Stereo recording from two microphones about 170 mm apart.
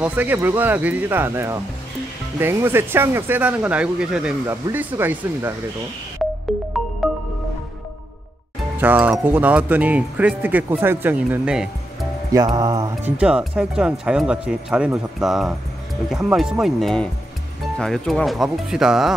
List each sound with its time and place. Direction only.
0.0 s speech: 10° right (ahead or behind)
6.2 s music: centre (ahead or behind)
8.7 s speech: 10° right (ahead or behind)
12.3 s music: 20° right (ahead or behind)
13.0 s speech: 5° right (ahead or behind)